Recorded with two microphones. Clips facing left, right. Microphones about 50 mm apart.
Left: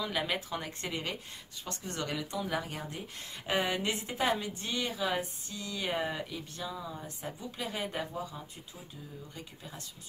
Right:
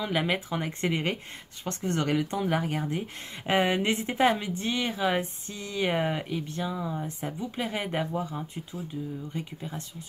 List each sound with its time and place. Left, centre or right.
0.0 s speech: right